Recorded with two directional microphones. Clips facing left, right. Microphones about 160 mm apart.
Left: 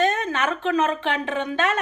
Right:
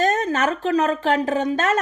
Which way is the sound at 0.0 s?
40° right (ahead or behind).